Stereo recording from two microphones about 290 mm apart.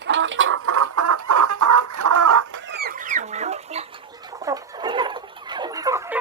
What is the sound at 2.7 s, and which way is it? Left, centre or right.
Chicken, right.